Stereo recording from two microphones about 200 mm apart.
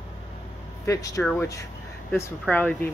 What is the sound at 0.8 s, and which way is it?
Speech, 15° left (ahead or behind).